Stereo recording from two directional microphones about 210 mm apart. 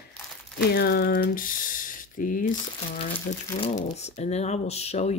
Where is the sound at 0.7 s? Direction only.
50° left (ahead or behind).